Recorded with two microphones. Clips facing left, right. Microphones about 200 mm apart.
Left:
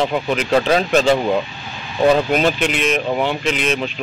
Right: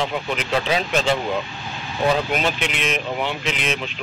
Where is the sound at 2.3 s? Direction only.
40° left (ahead or behind).